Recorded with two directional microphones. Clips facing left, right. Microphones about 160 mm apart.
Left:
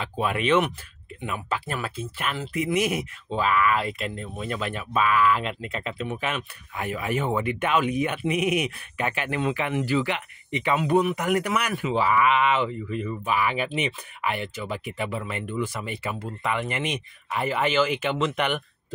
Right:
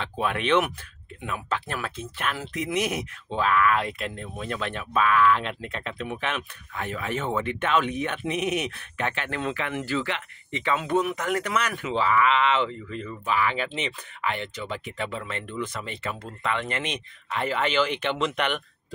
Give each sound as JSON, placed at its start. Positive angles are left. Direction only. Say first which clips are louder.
{"t": 0.0, "sound": "speech", "louder": "left 1 dB", "side_deg": 5}
{"t": 10.8, "sound": "speech", "louder": "left 5 dB", "side_deg": 5}